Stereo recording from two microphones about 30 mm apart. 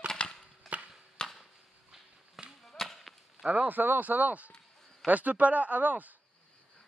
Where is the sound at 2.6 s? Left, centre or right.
Centre.